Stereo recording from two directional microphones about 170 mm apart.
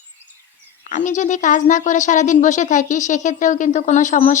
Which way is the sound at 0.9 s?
45° left (ahead or behind).